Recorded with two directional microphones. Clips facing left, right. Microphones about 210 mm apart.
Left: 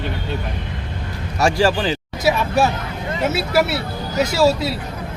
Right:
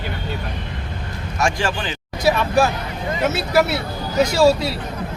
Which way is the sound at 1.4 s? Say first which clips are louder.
Left 5 dB; 35° left (ahead or behind).